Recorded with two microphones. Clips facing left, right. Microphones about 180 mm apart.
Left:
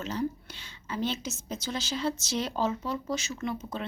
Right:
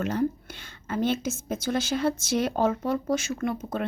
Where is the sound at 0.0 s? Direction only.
55° right (ahead or behind).